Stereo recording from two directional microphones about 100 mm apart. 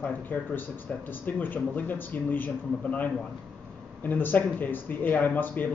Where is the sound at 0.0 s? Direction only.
20° left (ahead or behind).